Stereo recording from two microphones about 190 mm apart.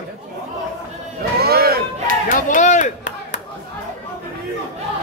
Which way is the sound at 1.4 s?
55° right (ahead or behind).